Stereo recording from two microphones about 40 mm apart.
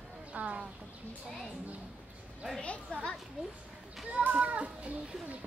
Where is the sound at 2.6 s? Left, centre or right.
Left.